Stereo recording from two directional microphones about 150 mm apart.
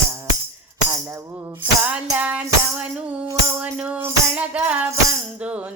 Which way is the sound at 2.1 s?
10° right (ahead or behind).